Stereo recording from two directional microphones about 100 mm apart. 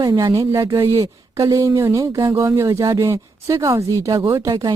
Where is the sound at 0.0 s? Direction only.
45° right (ahead or behind).